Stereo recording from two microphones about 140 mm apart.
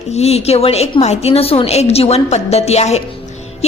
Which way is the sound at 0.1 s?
50° left (ahead or behind).